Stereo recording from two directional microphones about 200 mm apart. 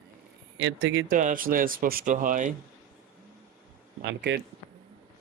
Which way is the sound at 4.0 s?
60° right (ahead or behind).